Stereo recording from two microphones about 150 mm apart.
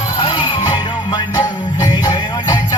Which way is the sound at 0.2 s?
30° left (ahead or behind).